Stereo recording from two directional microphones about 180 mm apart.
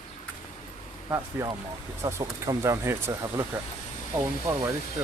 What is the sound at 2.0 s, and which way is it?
Speech, 20° right (ahead or behind).